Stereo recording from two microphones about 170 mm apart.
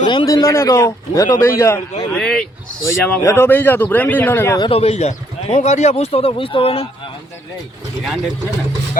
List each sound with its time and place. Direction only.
0.0 s speech: 25° left (ahead or behind)
2.1 s speech: 5° left (ahead or behind)
4.6 s speech: 35° left (ahead or behind)